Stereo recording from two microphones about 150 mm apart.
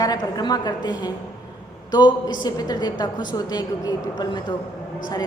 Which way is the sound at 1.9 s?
30° left (ahead or behind).